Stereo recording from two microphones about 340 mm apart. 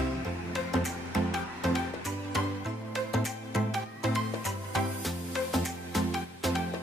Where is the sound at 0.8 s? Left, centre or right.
Centre.